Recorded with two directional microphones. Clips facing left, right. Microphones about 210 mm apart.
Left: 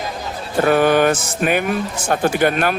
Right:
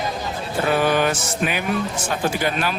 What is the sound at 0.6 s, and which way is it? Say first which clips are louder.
Mantra: left 5 dB; 55° left (ahead or behind).